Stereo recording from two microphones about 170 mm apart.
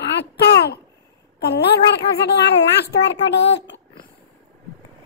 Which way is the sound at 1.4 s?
75° left (ahead or behind).